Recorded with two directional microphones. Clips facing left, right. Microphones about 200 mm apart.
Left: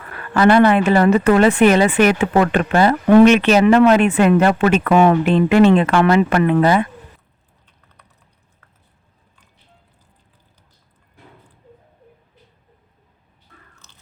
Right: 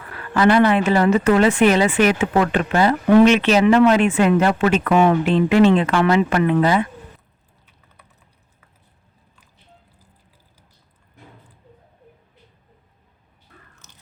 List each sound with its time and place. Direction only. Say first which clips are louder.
0.3 s speech: left 3 dB; 55° left (ahead or behind)